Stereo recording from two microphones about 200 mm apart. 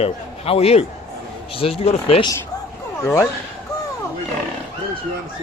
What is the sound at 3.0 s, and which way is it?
Speech, 15° left (ahead or behind).